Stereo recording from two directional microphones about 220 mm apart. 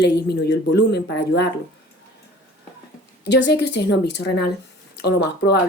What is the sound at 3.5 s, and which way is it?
A woman's voice, 50° left (ahead or behind).